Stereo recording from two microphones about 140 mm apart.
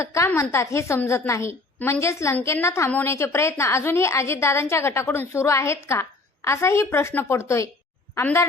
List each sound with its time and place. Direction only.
0.0 s a woman's voice: 20° left (ahead or behind)